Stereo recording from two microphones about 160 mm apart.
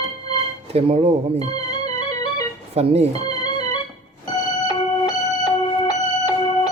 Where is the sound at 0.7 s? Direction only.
35° right (ahead or behind).